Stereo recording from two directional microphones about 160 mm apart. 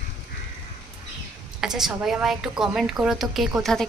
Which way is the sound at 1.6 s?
5° right (ahead or behind).